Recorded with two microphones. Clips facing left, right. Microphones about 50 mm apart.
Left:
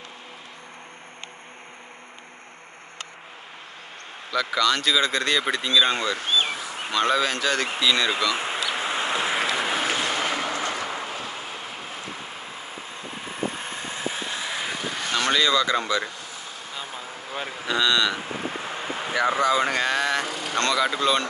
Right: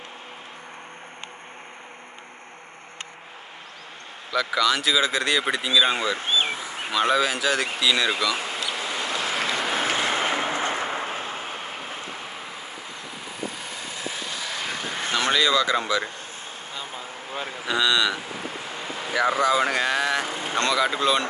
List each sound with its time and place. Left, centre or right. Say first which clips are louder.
4.3 s speech: even; centre
6.9 s speech: right 1 dB; centre
8.4 s a sound: left 2 dB; left; by 9.9 s centre
9.9 s train: right 2 dB; right
13.4 s vehicle: left 4 dB; left
14.6 s vehicle: left 1 dB; centre
15.0 s speech: even; centre
16.9 s a sound: even; right
17.6 s speech: even; centre
18.1 s a sound: left 2 dB; left
19.4 s speech: even; centre
20.2 s vehicle: right 1 dB; right
20.5 s speech: even; centre